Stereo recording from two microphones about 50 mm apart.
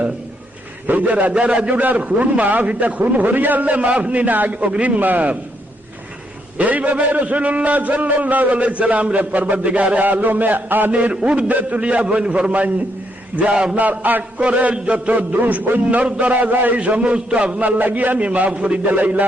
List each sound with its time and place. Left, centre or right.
0.9 s a man's voice: right
1.7 s a man's voice: right
4.9 s a man's voice: right
6.6 s a man's voice: right
10.9 s a man's voice: right
13.5 s a man's voice: centre
13.7 s a man's voice: right
15.8 s a man's voice: right